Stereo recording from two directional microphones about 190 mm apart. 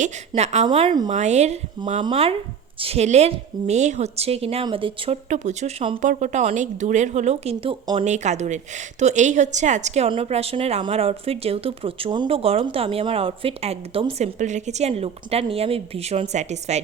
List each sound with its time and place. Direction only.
0.0 s speech: 35° right (ahead or behind)
1.1 s speech: 35° right (ahead or behind)
5.3 s speech: 40° right (ahead or behind)